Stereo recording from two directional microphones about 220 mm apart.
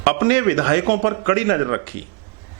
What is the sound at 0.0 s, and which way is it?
A man's voice, 15° right (ahead or behind).